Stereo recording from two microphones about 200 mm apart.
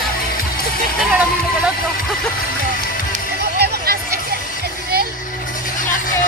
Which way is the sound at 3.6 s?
50° right (ahead or behind).